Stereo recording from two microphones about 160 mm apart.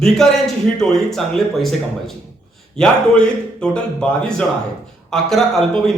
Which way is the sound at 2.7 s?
5° left (ahead or behind).